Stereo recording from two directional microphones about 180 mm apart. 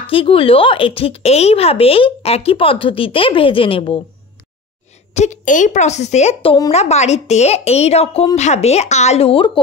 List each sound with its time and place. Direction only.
0.0 s speech: 30° left (ahead or behind)
5.1 s speech: 40° left (ahead or behind)